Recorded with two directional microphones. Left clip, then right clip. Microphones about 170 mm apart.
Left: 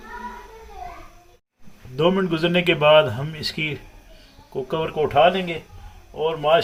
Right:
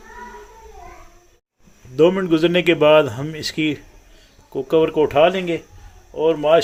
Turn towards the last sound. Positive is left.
turn(degrees=-55)  # may be behind; listen again after turning